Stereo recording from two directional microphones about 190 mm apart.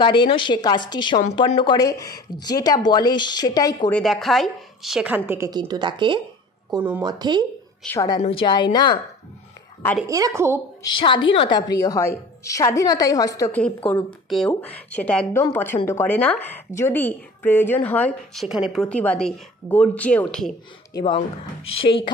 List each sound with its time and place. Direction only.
0.0 s speech: 25° left (ahead or behind)
3.9 s speech: centre (ahead or behind)
5.5 s speech: 20° right (ahead or behind)
7.8 s a woman's voice: 10° left (ahead or behind)
8.2 s speech: 30° left (ahead or behind)
10.0 s a woman's voice: 15° right (ahead or behind)
10.8 s a woman's voice: 25° left (ahead or behind)
13.6 s a woman's voice: 10° left (ahead or behind)
21.8 s speech: 25° left (ahead or behind)